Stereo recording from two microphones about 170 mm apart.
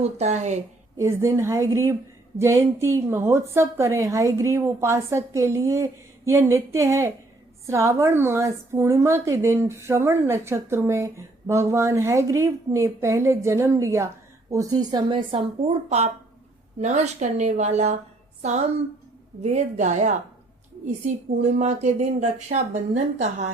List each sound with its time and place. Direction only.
0.0 s speech: 40° right (ahead or behind)
0.9 s speech: 15° right (ahead or behind); by 17.9 s 40° right (ahead or behind)
19.4 s speech: 45° right (ahead or behind)
21.6 s speech: 45° right (ahead or behind)